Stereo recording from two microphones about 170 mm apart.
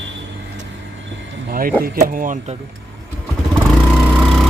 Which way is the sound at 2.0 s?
50° right (ahead or behind).